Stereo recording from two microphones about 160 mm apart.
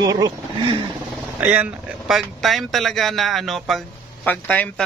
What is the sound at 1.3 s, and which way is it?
A man's voice, 10° right (ahead or behind).